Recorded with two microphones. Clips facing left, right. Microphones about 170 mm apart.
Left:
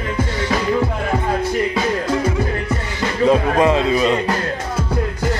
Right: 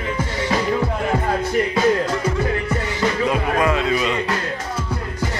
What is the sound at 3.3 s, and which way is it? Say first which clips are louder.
Speech: left 4 dB; 30° left (ahead or behind).